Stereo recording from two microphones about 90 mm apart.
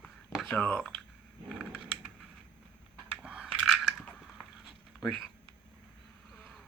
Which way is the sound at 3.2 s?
10° right (ahead or behind).